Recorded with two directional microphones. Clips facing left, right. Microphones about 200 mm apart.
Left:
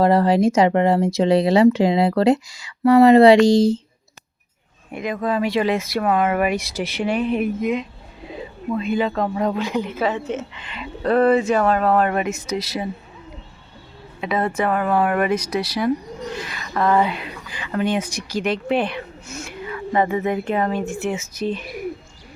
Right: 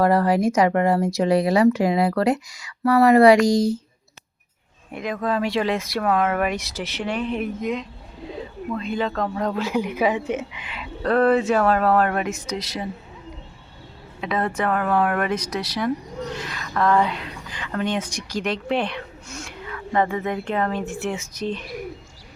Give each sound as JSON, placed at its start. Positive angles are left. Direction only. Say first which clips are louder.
{"t": 0.0, "sound": "speech", "louder": "left 3 dB", "side_deg": 25}
{"t": 4.9, "sound": "a woman's voice", "louder": "left 2 dB", "side_deg": 0}
{"t": 14.2, "sound": "a woman's voice", "louder": "left 2 dB", "side_deg": 5}